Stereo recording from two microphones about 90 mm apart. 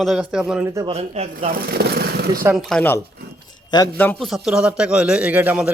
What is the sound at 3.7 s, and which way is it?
Speech, 50° left (ahead or behind).